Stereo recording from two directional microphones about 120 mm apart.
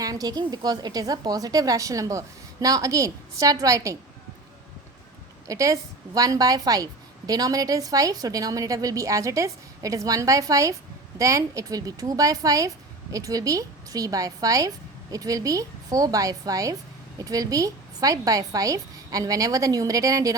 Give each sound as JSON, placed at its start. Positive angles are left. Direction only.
{"t": 0.0, "sound": "a woman's voice", "side_deg": -30}
{"t": 5.5, "sound": "a woman's voice", "side_deg": -25}